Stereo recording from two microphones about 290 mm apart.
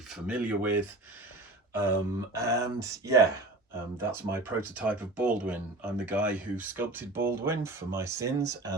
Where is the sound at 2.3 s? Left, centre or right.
Centre.